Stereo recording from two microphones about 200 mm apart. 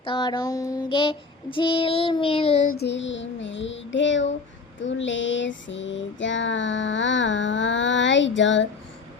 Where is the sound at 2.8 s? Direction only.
65° left (ahead or behind).